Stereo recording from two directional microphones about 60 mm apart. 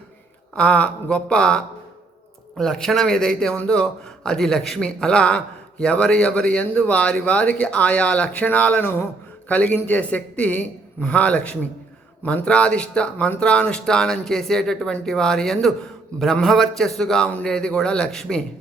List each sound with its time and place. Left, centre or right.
0.5 s a man's voice: centre